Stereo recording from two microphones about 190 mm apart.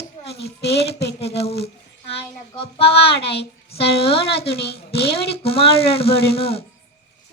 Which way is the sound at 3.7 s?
30° left (ahead or behind).